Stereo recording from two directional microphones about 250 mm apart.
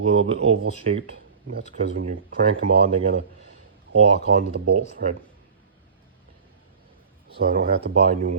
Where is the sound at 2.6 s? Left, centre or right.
Right.